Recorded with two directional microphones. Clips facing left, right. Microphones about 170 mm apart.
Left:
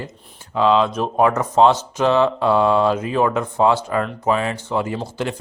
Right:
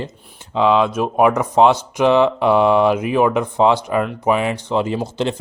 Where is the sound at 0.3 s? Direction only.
20° right (ahead or behind).